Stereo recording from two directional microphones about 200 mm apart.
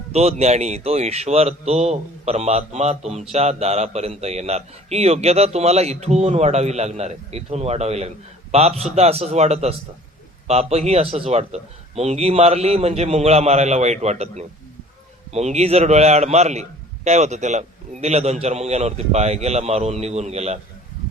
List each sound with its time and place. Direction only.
0.1 s speech: 30° right (ahead or behind)